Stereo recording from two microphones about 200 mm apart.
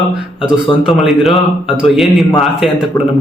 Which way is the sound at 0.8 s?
Centre (ahead or behind).